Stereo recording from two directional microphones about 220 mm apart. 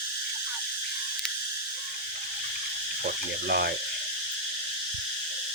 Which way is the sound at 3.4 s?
45° right (ahead or behind).